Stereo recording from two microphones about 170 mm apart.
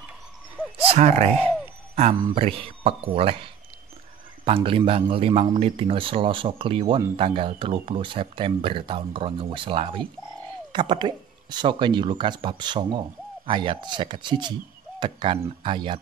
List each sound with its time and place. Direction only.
0.7 s speech: 35° right (ahead or behind)
4.6 s speech: 30° right (ahead or behind)